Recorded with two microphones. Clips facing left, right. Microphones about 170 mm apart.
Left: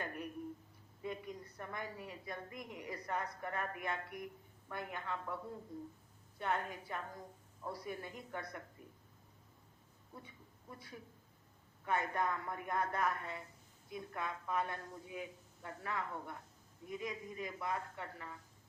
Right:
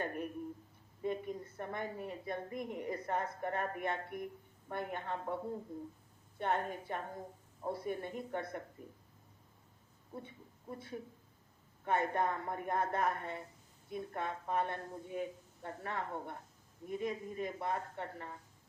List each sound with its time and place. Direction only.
0.0 s a sound: 40° right (ahead or behind)
1.4 s a sound: 30° right (ahead or behind)
2.0 s speech: 40° right (ahead or behind)
2.9 s speech: 35° right (ahead or behind)
4.0 s speech: 50° right (ahead or behind)
6.4 s speech: 40° right (ahead or behind)
7.1 s speech: 25° right (ahead or behind)
7.9 s speech: 45° right (ahead or behind)
8.4 s speech: 25° right (ahead or behind)
10.2 s speech: 30° right (ahead or behind)